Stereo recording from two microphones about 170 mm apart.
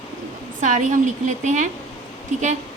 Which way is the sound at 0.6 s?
45° right (ahead or behind).